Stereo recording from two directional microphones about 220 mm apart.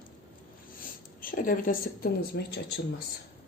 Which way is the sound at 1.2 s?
40° left (ahead or behind).